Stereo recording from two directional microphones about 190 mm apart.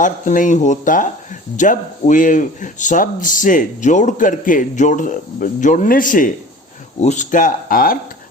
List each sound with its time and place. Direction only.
0.0 s speech: 40° left (ahead or behind)